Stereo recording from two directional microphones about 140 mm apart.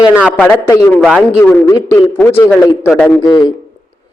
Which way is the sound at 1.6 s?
25° left (ahead or behind).